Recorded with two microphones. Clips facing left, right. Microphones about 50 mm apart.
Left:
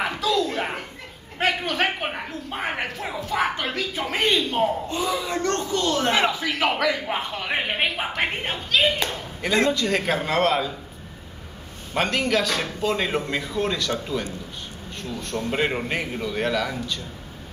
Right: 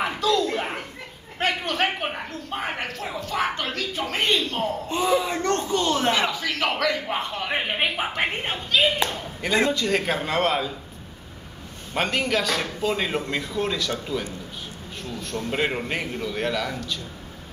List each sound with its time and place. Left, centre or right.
0.0 s a sound: centre
1.4 s a man's voice: centre
4.8 s speech: right
6.1 s a man's voice: centre
11.9 s a man's voice: centre
15.3 s a man's voice: centre